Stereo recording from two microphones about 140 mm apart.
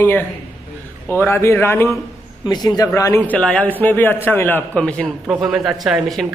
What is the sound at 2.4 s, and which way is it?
A man's voice, 30° left (ahead or behind).